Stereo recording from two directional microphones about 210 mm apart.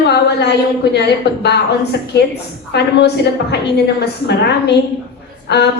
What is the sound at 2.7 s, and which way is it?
A woman's voice, 50° left (ahead or behind).